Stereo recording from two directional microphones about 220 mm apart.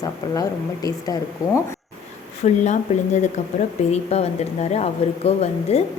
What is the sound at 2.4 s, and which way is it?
Speech, 30° left (ahead or behind).